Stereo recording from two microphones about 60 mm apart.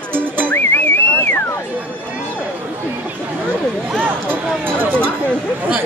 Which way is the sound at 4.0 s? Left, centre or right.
Right.